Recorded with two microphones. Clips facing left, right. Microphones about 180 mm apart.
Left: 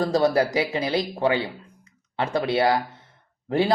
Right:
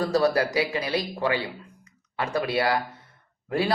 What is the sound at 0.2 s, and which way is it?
Speech, 25° left (ahead or behind).